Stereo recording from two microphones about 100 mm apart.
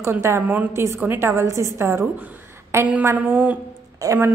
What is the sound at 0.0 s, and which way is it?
A woman's voice, 25° right (ahead or behind).